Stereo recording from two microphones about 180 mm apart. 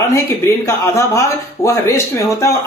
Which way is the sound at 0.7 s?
15° left (ahead or behind).